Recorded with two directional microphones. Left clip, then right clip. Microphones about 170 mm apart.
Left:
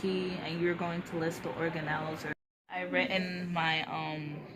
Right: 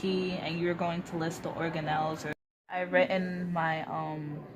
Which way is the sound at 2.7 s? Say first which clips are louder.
Right 4 dB; 40° right (ahead or behind).